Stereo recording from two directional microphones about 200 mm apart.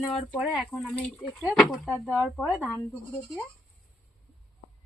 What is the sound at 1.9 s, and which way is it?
Speech, 10° right (ahead or behind).